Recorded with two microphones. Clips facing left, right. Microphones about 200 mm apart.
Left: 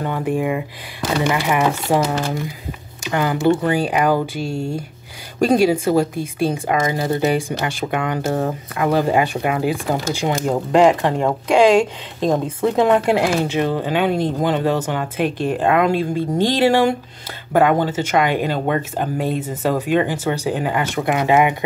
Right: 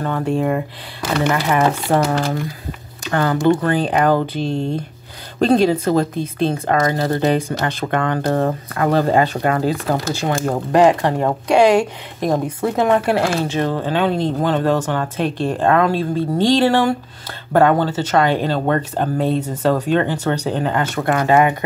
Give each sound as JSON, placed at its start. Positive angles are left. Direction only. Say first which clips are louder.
{"t": 0.0, "sound": "speech", "louder": "right 1 dB", "side_deg": 15}
{"t": 11.8, "sound": "speech", "louder": "left 2 dB", "side_deg": 20}